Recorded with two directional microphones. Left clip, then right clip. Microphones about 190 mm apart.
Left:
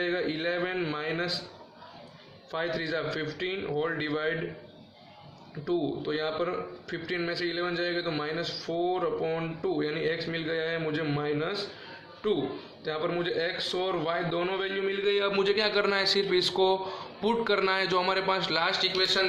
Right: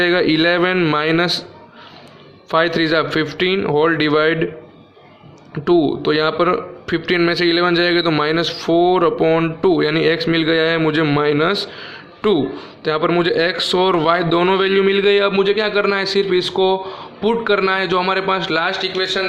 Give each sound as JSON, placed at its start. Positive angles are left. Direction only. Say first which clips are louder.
{"t": 0.0, "sound": "a man's voice", "louder": "right 15 dB", "side_deg": -50}
{"t": 2.5, "sound": "a man's voice", "louder": "right 16 dB", "side_deg": -50}
{"t": 5.6, "sound": "a man's voice", "louder": "right 15 dB", "side_deg": -55}
{"t": 15.3, "sound": "a man's voice", "louder": "right 10 dB", "side_deg": -20}